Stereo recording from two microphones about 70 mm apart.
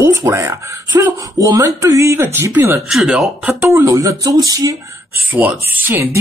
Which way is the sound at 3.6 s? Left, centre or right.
Right.